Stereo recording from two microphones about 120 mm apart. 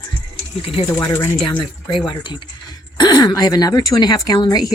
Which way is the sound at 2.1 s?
40° left (ahead or behind).